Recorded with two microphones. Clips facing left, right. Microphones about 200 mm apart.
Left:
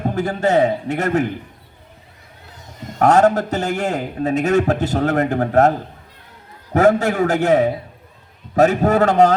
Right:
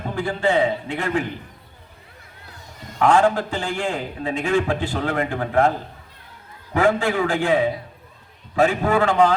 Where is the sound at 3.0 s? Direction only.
40° left (ahead or behind).